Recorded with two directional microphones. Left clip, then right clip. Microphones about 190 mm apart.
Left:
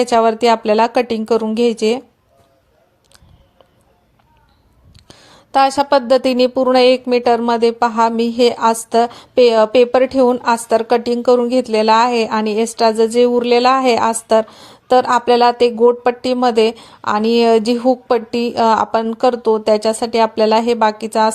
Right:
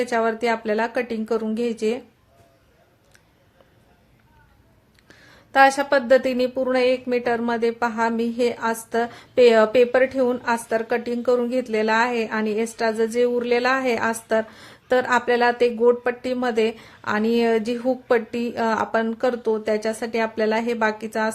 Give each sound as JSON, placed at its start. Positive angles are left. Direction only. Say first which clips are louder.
{"t": 0.0, "sound": "a woman's voice", "louder": "left 9 dB", "side_deg": 30}
{"t": 5.0, "sound": "a woman's voice", "louder": "left 6 dB", "side_deg": 25}